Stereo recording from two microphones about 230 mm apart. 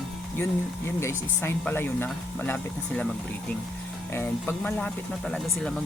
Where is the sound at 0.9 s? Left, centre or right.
Centre.